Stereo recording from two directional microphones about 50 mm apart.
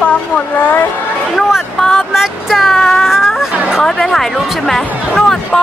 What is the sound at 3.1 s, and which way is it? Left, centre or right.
Baby cry, centre.